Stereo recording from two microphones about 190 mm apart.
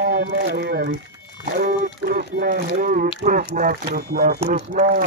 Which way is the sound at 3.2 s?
45° right (ahead or behind).